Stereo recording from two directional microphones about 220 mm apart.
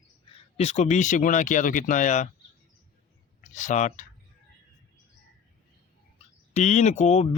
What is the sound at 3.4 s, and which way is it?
Speech, 35° left (ahead or behind).